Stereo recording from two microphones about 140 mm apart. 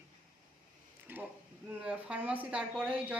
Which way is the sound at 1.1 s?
15° right (ahead or behind).